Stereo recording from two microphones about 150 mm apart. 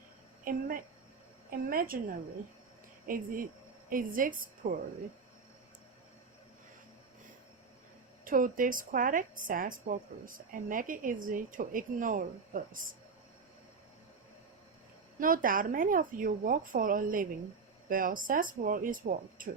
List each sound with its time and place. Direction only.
0.5 s speech: 70° right (ahead or behind)
8.2 s a woman's voice: 65° right (ahead or behind)
15.2 s speech: 65° right (ahead or behind)